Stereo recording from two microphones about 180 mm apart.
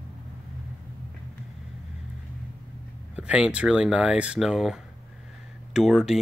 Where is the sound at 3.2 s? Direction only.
5° right (ahead or behind).